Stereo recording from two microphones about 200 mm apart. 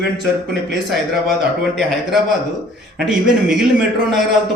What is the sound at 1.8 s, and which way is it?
A man's voice, centre (ahead or behind).